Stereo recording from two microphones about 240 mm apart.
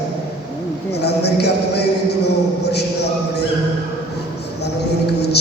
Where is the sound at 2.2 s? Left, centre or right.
Left.